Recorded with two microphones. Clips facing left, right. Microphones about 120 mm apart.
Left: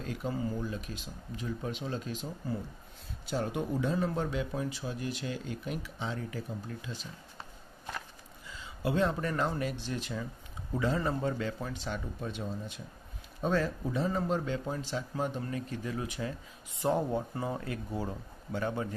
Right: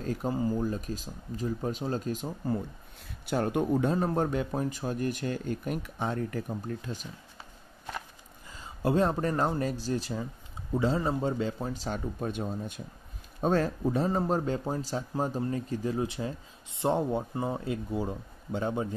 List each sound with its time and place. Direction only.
0.0 s a man's voice: 40° right (ahead or behind)
3.3 s speech: 60° right (ahead or behind)
8.5 s a man's voice: 45° right (ahead or behind)
10.7 s a man's voice: 25° right (ahead or behind)
11.7 s a man's voice: 40° right (ahead or behind); by 18.9 s 20° right (ahead or behind)